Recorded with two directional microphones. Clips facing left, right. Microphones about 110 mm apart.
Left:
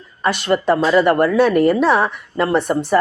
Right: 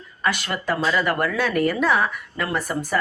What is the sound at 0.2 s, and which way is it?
A woman's voice, 25° left (ahead or behind).